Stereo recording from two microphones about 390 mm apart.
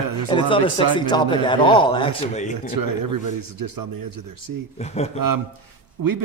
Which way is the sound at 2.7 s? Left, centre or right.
Right.